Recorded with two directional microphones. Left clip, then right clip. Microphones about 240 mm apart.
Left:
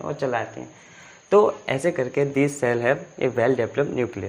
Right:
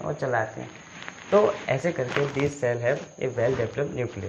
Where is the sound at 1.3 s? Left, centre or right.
Left.